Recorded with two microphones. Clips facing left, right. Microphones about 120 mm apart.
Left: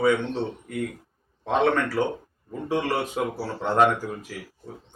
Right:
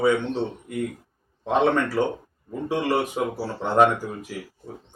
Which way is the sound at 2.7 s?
15° right (ahead or behind).